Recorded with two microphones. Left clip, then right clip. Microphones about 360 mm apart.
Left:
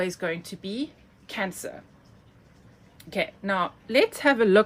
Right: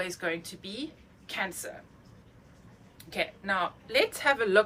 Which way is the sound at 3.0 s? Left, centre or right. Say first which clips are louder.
Left 4 dB; centre.